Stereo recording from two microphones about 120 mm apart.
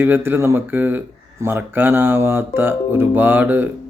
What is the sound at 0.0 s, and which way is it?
Speech, 20° right (ahead or behind).